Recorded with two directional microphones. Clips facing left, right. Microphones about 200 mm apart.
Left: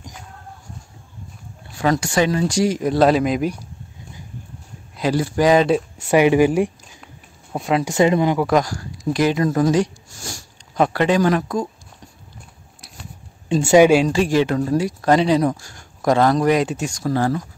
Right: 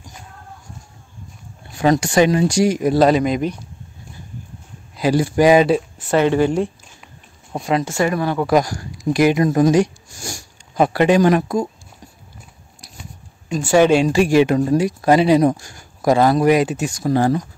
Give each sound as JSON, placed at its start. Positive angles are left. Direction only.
{"t": 1.8, "sound": "speech", "side_deg": -20}
{"t": 4.9, "sound": "speech", "side_deg": -10}
{"t": 6.0, "sound": "speech", "side_deg": 10}
{"t": 7.5, "sound": "speech", "side_deg": 0}
{"t": 7.8, "sound": "speech", "side_deg": 20}
{"t": 8.4, "sound": "speech", "side_deg": -5}
{"t": 13.7, "sound": "speech", "side_deg": 10}
{"t": 14.0, "sound": "speech", "side_deg": -10}
{"t": 17.0, "sound": "speech", "side_deg": -20}